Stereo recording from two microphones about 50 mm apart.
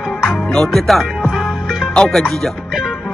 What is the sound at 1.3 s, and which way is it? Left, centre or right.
Music, centre.